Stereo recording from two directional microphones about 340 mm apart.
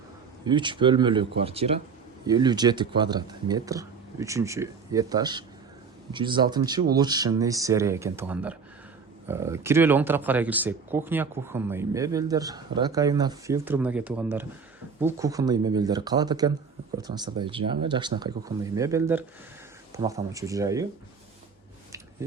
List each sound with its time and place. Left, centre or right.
0.4 s speech: centre